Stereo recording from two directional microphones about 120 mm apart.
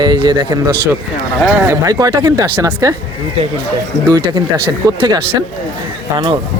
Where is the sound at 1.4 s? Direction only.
15° right (ahead or behind).